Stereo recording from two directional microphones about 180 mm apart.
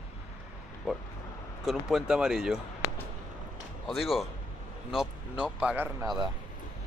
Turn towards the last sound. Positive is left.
turn(degrees=-10)  # may be behind; listen again after turning